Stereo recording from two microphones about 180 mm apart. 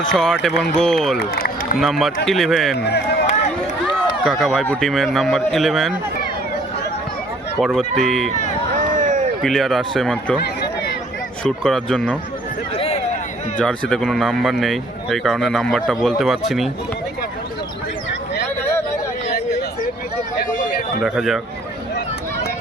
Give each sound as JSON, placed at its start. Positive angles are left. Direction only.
{"t": 0.0, "sound": "speech", "side_deg": 5}
{"t": 1.2, "sound": "speech", "side_deg": 55}
{"t": 1.8, "sound": "speech", "side_deg": 0}
{"t": 2.7, "sound": "speech", "side_deg": 65}
{"t": 4.2, "sound": "speech", "side_deg": 0}
{"t": 7.6, "sound": "speech", "side_deg": 0}
{"t": 8.7, "sound": "a sound", "side_deg": -45}
{"t": 9.4, "sound": "speech", "side_deg": 0}
{"t": 10.4, "sound": "a sound", "side_deg": 65}
{"t": 11.4, "sound": "speech", "side_deg": 5}
{"t": 12.7, "sound": "a sound", "side_deg": 35}
{"t": 13.6, "sound": "speech", "side_deg": 5}
{"t": 20.5, "sound": "a sound", "side_deg": 45}
{"t": 21.0, "sound": "speech", "side_deg": 0}